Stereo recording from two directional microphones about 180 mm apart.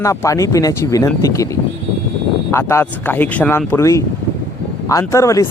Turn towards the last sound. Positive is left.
turn(degrees=15)  # may be behind; listen again after turning